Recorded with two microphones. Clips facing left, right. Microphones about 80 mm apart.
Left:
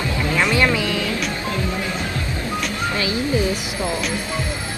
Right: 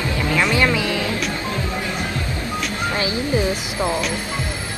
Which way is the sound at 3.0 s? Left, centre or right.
Right.